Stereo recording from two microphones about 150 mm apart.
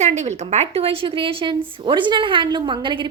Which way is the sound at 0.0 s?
50° right (ahead or behind).